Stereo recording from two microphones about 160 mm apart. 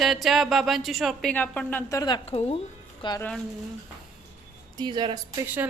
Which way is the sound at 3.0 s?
25° left (ahead or behind).